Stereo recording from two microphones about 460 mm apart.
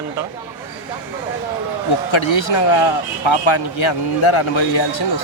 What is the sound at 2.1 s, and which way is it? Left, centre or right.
Speech, left.